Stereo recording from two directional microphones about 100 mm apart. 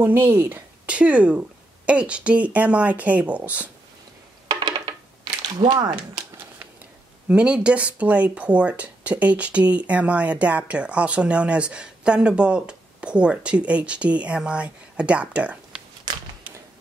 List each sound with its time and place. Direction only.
0.0 s speech: 20° right (ahead or behind)
4.5 s a sound: 45° right (ahead or behind)
5.6 s speech: 45° right (ahead or behind)
7.2 s speech: 10° right (ahead or behind)